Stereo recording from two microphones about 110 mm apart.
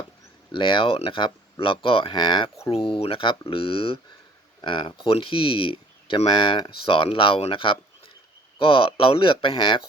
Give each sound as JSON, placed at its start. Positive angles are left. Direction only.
{"t": 0.5, "sound": "speech", "side_deg": 50}
{"t": 2.8, "sound": "speech", "side_deg": 55}
{"t": 4.6, "sound": "speech", "side_deg": 45}